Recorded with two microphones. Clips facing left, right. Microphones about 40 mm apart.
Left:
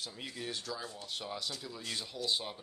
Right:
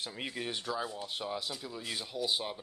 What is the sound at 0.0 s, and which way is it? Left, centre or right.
Speech, right.